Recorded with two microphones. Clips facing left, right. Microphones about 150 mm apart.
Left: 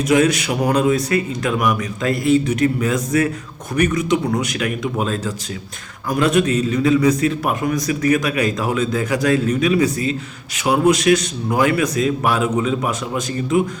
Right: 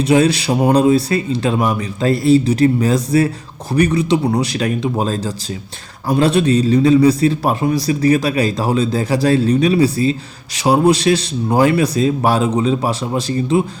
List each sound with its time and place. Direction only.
0.0 s a man's voice: 30° right (ahead or behind)